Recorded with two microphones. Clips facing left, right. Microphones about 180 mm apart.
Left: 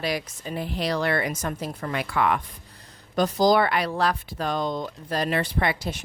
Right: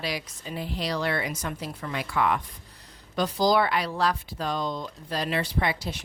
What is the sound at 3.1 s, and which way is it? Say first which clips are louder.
A woman's voice: left 3 dB; 50° left (ahead or behind).